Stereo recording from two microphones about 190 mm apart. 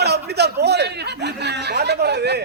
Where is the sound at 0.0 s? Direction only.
60° right (ahead or behind).